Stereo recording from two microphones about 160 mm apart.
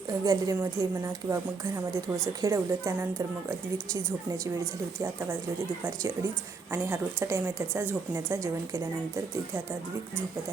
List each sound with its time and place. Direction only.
0.3 s a woman's voice: 20° right (ahead or behind)
6.7 s speech: 15° right (ahead or behind)